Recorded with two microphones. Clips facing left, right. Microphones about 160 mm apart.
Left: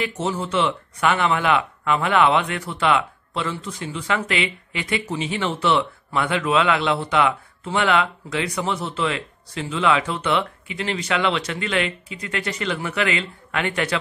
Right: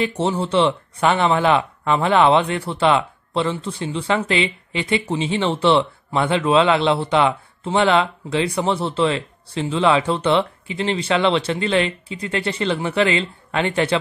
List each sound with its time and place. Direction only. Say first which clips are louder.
0.0 s speech: right 4 dB; 30° right (ahead or behind)